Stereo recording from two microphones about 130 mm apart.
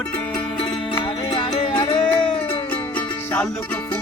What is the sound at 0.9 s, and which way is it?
Music, 40° left (ahead or behind).